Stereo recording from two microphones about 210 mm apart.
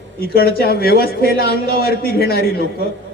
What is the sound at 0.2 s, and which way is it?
A man's voice, 45° left (ahead or behind).